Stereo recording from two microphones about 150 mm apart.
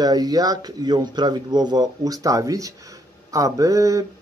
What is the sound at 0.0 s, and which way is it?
Speech, 25° right (ahead or behind).